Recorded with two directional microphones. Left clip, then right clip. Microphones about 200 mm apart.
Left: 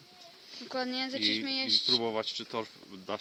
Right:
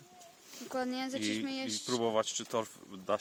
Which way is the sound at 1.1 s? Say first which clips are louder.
Left 5 dB; 35° right (ahead or behind).